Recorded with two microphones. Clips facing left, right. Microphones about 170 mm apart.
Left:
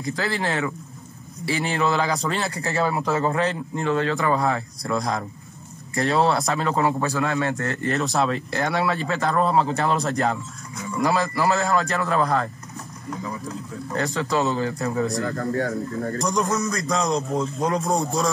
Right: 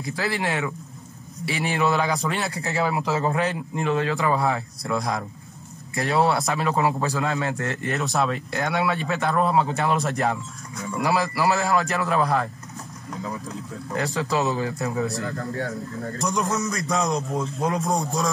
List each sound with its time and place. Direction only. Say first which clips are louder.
0.0 s a man's voice: left 1 dB; 5° right (ahead or behind)
13.9 s speech: left 1 dB; 15° right (ahead or behind)
14.3 s a man's voice: left 2 dB; 5° right (ahead or behind)
15.2 s speech: left 4 dB; 50° left (ahead or behind)
16.5 s a man's voice: left 1 dB; 5° right (ahead or behind)